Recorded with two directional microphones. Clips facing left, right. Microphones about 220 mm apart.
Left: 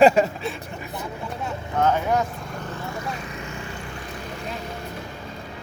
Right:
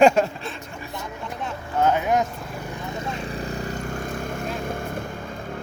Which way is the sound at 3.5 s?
40° right (ahead or behind).